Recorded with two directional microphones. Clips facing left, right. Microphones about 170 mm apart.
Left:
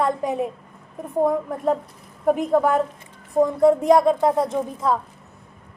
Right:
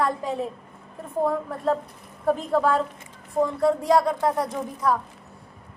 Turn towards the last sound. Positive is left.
turn(degrees=25)  # may be behind; listen again after turning